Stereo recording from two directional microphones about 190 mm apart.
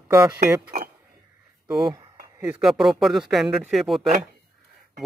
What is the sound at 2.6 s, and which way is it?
Speech, centre (ahead or behind).